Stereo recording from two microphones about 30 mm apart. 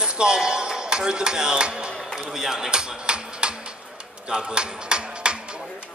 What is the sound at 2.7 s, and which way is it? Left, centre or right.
Music, right.